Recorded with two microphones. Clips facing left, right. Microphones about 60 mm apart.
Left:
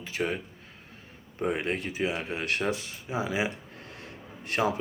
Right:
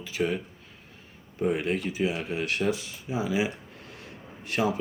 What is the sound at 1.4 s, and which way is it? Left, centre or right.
Speech, left.